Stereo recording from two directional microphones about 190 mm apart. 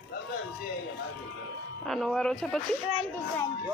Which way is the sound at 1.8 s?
Centre (ahead or behind).